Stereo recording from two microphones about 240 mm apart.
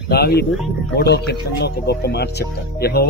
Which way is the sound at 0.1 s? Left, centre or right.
Left.